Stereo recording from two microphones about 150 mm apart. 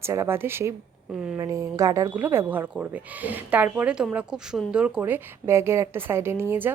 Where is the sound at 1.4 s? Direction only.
20° right (ahead or behind).